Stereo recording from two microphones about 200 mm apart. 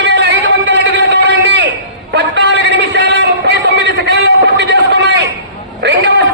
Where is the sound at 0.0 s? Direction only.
60° right (ahead or behind).